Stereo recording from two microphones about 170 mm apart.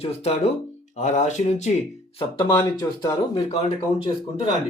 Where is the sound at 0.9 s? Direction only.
45° left (ahead or behind).